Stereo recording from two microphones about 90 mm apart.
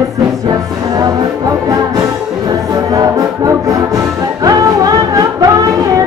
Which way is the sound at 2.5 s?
40° right (ahead or behind).